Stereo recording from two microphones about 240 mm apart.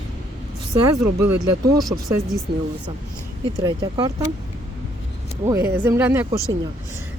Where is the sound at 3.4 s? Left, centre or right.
Centre.